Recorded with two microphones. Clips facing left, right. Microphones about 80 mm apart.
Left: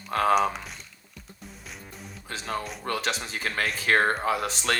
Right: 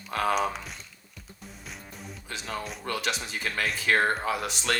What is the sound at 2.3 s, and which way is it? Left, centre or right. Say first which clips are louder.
Speech: left 3 dB; left.